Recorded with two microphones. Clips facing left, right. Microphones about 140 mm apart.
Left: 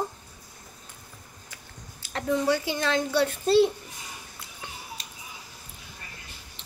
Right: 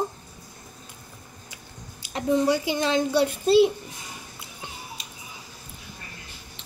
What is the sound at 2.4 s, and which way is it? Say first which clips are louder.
A child's voice: right 2 dB; 15° right (ahead or behind).